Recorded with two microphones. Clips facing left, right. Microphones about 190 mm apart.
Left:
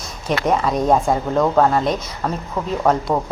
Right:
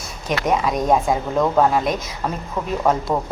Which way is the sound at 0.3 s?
5° right (ahead or behind).